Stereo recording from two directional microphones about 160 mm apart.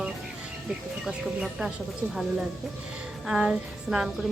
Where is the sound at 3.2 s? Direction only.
5° right (ahead or behind).